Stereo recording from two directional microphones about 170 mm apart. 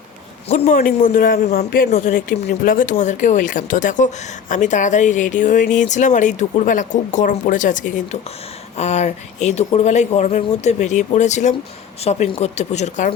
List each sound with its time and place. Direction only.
0.4 s speech: 40° left (ahead or behind)